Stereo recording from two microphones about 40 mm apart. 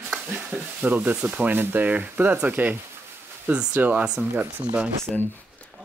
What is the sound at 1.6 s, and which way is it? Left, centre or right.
Speech, right.